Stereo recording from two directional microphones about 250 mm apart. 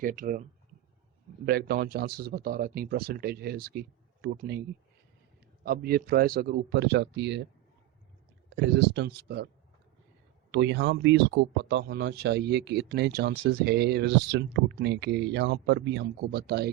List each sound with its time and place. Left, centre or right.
0.0 s speech: right
1.5 s speech: right
5.6 s speech: right
8.4 s speech: right
10.5 s speech: right